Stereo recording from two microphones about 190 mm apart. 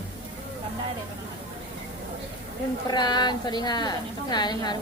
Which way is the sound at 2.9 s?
20° left (ahead or behind).